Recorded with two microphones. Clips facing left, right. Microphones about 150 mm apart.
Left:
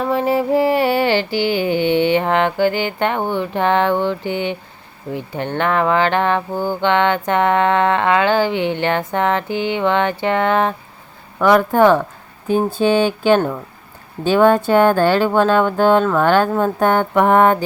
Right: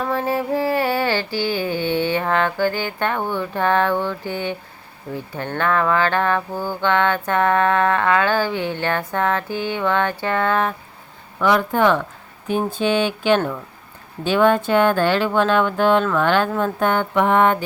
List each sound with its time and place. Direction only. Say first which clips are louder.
0.1 s carnatic music: left 7 dB; 15° left (ahead or behind)
1.4 s mantra: left 5 dB; 20° left (ahead or behind)
11.3 s speech: left 5 dB; 50° left (ahead or behind)